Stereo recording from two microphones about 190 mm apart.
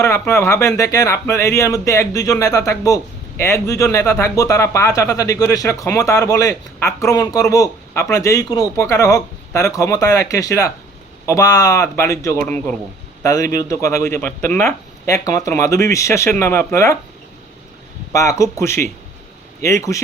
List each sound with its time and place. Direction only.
0.0 s speech: 15° left (ahead or behind)
18.1 s speech: 15° left (ahead or behind)